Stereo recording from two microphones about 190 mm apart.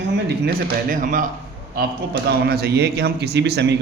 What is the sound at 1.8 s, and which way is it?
A man's voice, 55° right (ahead or behind).